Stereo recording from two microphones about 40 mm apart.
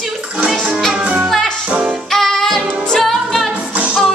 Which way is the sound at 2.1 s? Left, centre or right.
Centre.